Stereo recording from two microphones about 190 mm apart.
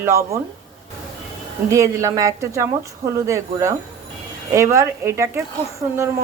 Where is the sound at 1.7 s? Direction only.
15° right (ahead or behind).